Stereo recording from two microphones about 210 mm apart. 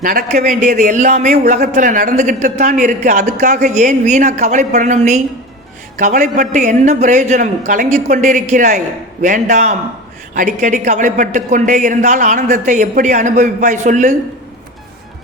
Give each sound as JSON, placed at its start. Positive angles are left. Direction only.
{"t": 0.0, "sound": "a woman's voice", "side_deg": -40}